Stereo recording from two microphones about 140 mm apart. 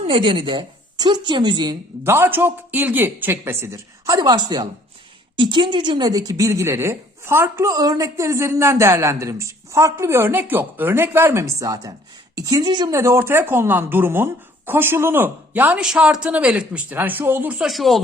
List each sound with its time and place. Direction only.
0.0 s a woman's voice: 40° right (ahead or behind)
2.0 s a woman's voice: 15° right (ahead or behind)
13.0 s a woman's voice: 20° right (ahead or behind); by 18.0 s centre (ahead or behind)